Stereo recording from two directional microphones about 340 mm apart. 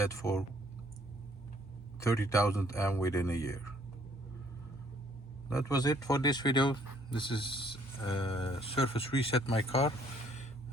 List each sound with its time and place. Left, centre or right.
0.0 s speech: centre
2.0 s speech: centre
5.5 s speech: centre